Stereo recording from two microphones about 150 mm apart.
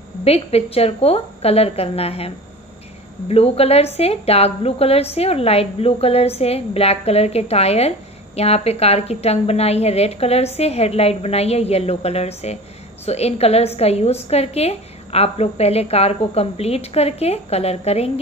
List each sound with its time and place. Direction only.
0.2 s a woman's voice: 40° left (ahead or behind)